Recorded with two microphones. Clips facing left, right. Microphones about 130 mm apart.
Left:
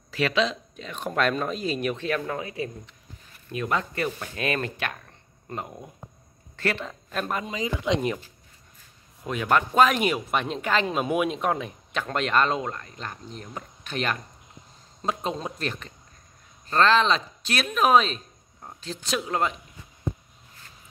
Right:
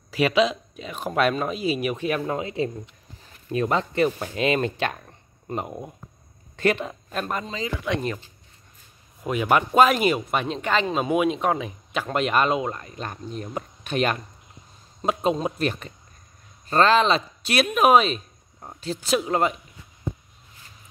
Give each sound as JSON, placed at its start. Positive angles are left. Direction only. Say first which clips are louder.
{"t": 0.1, "sound": "speech", "louder": "right 4 dB", "side_deg": -10}
{"t": 7.2, "sound": "speech", "louder": "right 1 dB", "side_deg": 0}
{"t": 7.4, "sound": "speech", "louder": "left 1 dB", "side_deg": 15}
{"t": 9.2, "sound": "speech", "louder": "right 2 dB", "side_deg": -10}